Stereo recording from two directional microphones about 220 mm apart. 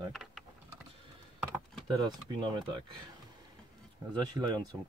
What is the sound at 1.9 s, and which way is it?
Speech, 20° right (ahead or behind).